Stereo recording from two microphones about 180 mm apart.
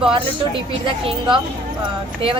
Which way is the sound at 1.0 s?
25° right (ahead or behind).